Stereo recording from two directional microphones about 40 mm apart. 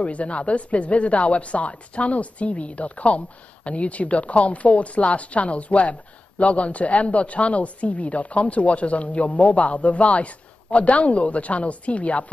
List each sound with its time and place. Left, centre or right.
0.0 s speech: left